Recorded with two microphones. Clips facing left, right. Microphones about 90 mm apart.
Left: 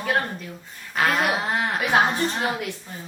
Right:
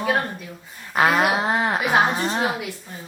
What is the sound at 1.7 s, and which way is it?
A woman's voice, 5° right (ahead or behind).